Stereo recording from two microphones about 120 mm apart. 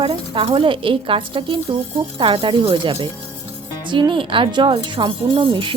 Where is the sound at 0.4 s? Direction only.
45° right (ahead or behind).